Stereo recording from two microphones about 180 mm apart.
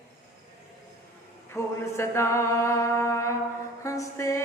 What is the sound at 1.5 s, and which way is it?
Music, 15° left (ahead or behind).